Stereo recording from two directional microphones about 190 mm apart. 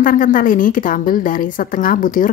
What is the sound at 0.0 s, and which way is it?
Speech, 45° left (ahead or behind).